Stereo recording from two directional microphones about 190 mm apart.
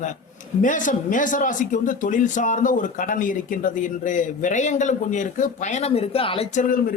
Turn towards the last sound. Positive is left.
turn(degrees=40)  # may be behind; listen again after turning